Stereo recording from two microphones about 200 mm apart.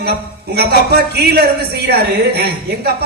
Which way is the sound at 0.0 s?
55° right (ahead or behind).